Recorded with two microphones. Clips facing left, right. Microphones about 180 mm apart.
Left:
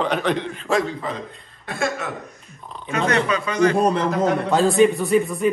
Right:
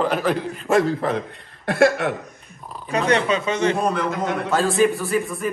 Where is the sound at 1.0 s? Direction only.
65° right (ahead or behind).